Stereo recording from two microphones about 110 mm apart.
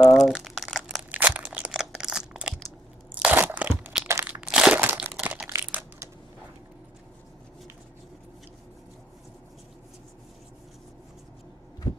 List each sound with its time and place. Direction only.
0.0 s crumpling: centre (ahead or behind)
1.1 s crunch: 15° right (ahead or behind)
4.1 s crushing: 25° right (ahead or behind)
4.4 s crushing: 5° right (ahead or behind)
5.1 s crumpling: 10° right (ahead or behind)